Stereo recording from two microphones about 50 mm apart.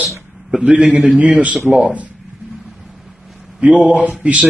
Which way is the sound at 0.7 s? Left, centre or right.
Right.